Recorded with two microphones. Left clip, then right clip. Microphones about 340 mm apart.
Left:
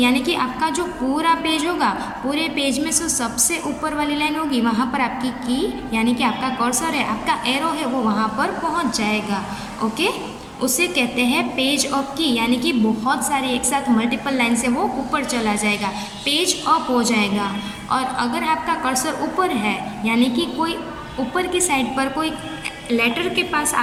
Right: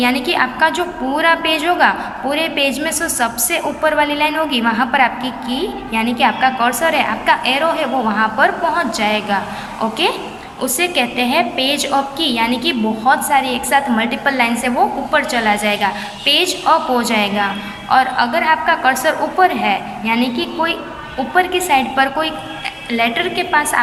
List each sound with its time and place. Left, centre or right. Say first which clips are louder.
0.0 s a woman's voice: right 4 dB; centre
10.6 s a woman's voice: right 3 dB; centre
21.3 s a woman's voice: right 7 dB; centre
23.5 s a woman's voice: right 6 dB; right